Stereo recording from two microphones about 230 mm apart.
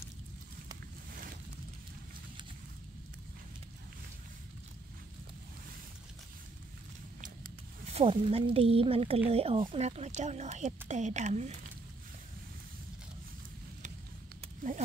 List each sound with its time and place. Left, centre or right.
7.8 s speech: right